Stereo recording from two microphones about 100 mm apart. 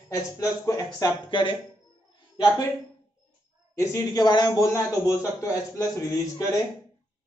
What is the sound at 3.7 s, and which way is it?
Speech, 30° left (ahead or behind).